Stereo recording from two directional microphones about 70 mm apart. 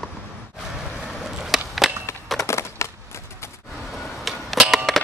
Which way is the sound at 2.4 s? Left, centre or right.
Left.